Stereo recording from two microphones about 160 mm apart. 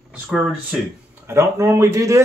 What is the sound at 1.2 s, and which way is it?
Speech, 20° right (ahead or behind).